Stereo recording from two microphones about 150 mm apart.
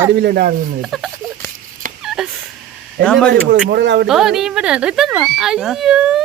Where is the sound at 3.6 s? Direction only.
90° right.